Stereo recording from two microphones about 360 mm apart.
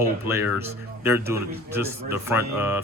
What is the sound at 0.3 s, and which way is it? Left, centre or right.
A man's voice, centre.